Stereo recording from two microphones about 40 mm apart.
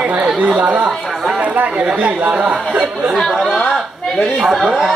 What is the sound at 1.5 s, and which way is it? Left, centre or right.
Speech, right.